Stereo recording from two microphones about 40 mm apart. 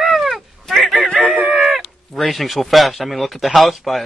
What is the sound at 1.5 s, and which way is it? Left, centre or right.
Chicken, centre.